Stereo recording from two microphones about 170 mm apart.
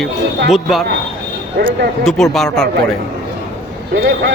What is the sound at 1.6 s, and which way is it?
Speech, 90° right.